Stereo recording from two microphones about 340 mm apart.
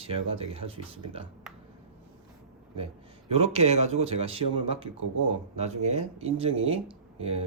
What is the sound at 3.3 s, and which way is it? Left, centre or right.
A man's voice, centre.